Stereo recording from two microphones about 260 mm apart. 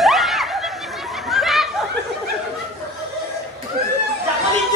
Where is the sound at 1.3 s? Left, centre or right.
Centre.